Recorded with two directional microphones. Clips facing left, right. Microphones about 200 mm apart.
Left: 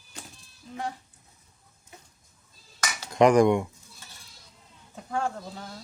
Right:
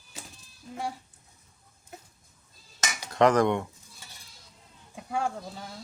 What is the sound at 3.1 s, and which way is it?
Speech, 15° left (ahead or behind).